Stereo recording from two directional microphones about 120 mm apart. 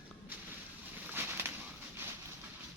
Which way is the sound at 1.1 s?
15° right (ahead or behind).